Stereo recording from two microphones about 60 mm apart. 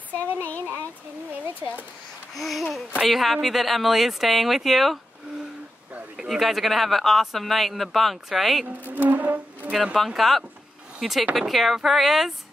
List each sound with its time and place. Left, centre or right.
0.4 s speech: left
1.4 s speech: right
2.3 s speech: centre
6.1 s speech: centre
8.6 s bee: right
9.9 s speech: centre